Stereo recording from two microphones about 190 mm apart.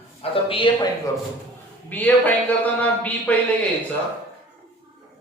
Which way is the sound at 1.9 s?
10° left (ahead or behind).